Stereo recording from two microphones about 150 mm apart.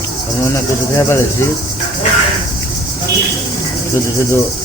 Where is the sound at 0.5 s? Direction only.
15° left (ahead or behind).